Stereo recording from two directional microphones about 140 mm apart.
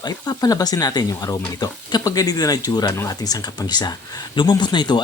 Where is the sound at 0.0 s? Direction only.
30° left (ahead or behind).